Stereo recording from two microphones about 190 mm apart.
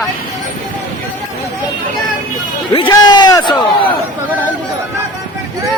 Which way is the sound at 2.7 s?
25° left (ahead or behind).